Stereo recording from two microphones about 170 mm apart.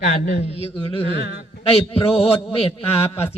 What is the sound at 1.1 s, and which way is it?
Speech, 70° left (ahead or behind).